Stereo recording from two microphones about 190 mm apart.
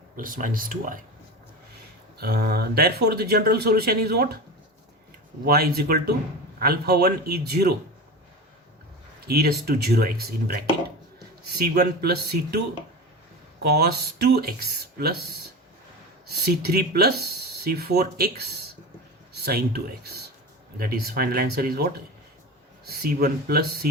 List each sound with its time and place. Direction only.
0.2 s speech: 45° right (ahead or behind)
2.1 s speech: 55° right (ahead or behind)
5.5 s speech: 55° right (ahead or behind)
9.2 s speech: 55° right (ahead or behind)
22.9 s speech: 55° right (ahead or behind)